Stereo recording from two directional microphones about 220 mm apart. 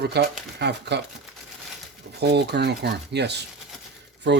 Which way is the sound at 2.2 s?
50° right (ahead or behind).